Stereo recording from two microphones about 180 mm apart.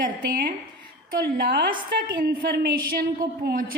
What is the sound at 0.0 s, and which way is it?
A woman's voice, 50° right (ahead or behind).